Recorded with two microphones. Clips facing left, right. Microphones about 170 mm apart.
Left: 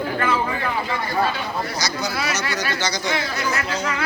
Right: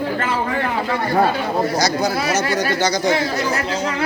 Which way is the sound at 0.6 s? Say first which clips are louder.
Right 4 dB; 55° right (ahead or behind).